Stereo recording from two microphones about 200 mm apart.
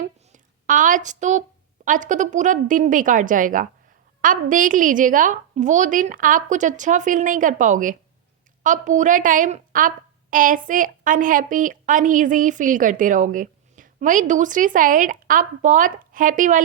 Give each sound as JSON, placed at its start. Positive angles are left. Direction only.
{"t": 0.0, "sound": "a woman's voice", "side_deg": -40}